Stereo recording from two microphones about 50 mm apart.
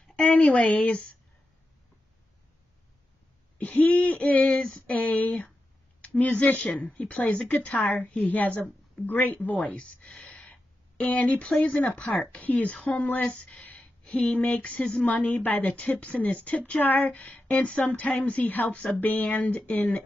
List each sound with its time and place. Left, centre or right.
0.1 s a woman's voice: left
3.5 s a sound: left
3.9 s speech: left
4.5 s speech: left
9.8 s speech: left
15.0 s speech: left